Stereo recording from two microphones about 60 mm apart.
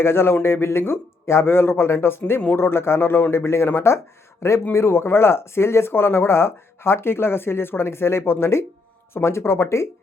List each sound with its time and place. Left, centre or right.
0.0 s speech: left
4.7 s speech: left